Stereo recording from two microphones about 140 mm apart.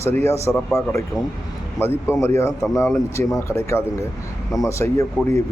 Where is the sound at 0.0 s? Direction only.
20° left (ahead or behind).